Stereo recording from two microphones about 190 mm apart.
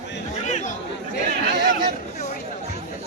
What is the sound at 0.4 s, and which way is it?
Chatter, 40° left (ahead or behind).